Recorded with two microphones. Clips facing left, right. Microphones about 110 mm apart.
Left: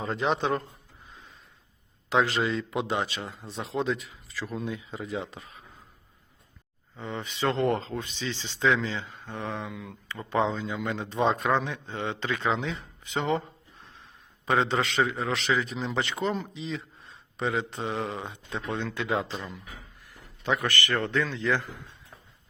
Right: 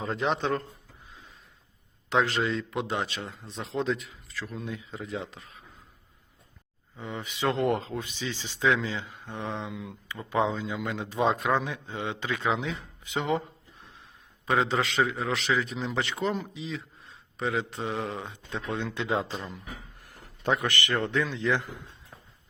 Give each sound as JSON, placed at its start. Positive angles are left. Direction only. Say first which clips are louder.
{"t": 0.0, "sound": "a man's voice", "louder": "left 1 dB", "side_deg": 0}
{"t": 2.0, "sound": "a man's voice", "louder": "left 1 dB", "side_deg": 0}
{"t": 6.9, "sound": "speech", "louder": "left 2 dB", "side_deg": -10}
{"t": 14.4, "sound": "a man's voice", "louder": "left 1 dB", "side_deg": 0}
{"t": 18.7, "sound": "speech", "louder": "even", "side_deg": -10}
{"t": 18.9, "sound": "speech", "louder": "even", "side_deg": -30}
{"t": 19.4, "sound": "a man's voice", "louder": "even", "side_deg": 0}
{"t": 20.1, "sound": "a sound", "louder": "right 4 dB", "side_deg": -60}
{"t": 20.6, "sound": "speech", "louder": "even", "side_deg": -20}